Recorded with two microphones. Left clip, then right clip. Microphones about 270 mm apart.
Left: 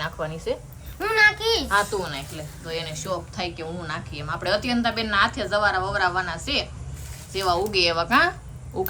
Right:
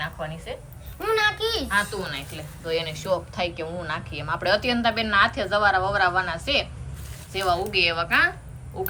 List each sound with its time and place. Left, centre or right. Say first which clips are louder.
0.0 s a woman's voice: left 3 dB; centre
0.9 s a sound: left 4 dB; centre
1.6 s a woman's voice: left 2 dB; centre